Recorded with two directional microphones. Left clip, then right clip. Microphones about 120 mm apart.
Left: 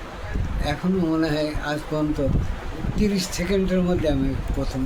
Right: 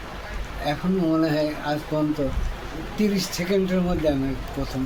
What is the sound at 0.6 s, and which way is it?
Speech, 15° left (ahead or behind).